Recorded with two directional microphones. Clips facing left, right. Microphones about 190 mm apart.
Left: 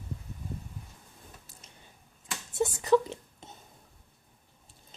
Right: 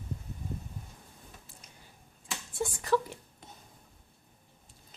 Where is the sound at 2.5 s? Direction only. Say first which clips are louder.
Left 5 dB; 20° left (ahead or behind).